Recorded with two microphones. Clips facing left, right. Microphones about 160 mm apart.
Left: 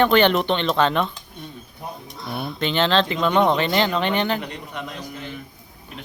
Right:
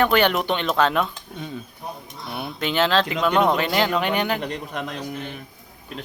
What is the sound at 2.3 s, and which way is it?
Speech, 5° right (ahead or behind).